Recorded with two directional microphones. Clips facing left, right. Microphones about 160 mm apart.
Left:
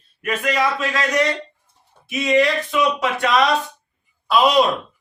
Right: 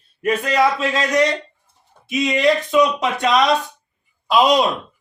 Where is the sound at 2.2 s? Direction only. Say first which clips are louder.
Even; 20° right (ahead or behind).